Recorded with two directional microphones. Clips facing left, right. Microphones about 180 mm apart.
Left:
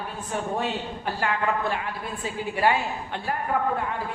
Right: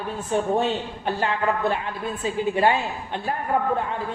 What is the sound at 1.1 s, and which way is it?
Speech, 20° right (ahead or behind).